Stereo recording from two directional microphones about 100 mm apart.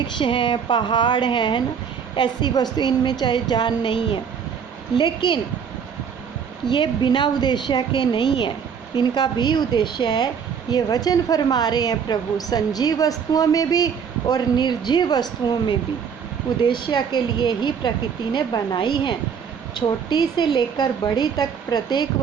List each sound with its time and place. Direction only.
0.0 s a woman's voice: 55° left (ahead or behind)
6.7 s a woman's voice: 50° left (ahead or behind)